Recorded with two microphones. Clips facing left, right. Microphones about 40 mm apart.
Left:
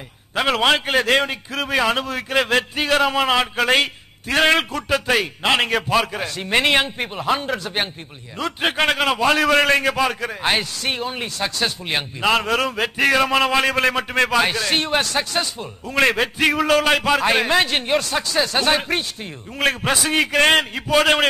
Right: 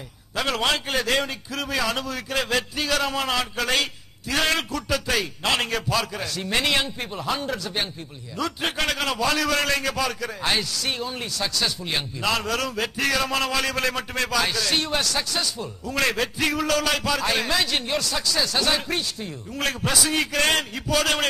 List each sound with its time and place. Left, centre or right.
0.3 s a man's voice: left